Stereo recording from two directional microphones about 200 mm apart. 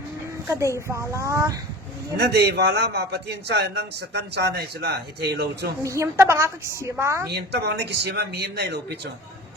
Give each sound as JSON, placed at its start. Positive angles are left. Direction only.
{"t": 0.4, "sound": "a woman's voice", "side_deg": -10}
{"t": 2.1, "sound": "a man's voice", "side_deg": -55}
{"t": 5.8, "sound": "a woman's voice", "side_deg": -15}
{"t": 7.3, "sound": "a man's voice", "side_deg": -55}